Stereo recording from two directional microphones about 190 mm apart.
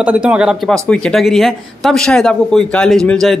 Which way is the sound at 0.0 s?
5° right (ahead or behind).